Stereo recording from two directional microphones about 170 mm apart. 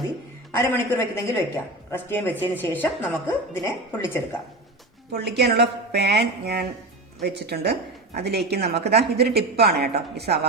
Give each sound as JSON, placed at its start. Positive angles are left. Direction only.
{"t": 0.5, "sound": "a woman's voice", "side_deg": 15}
{"t": 5.1, "sound": "a woman's voice", "side_deg": -75}